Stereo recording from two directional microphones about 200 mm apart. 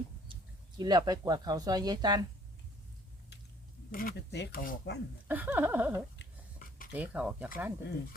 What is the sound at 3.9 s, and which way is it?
Speech, 45° left (ahead or behind).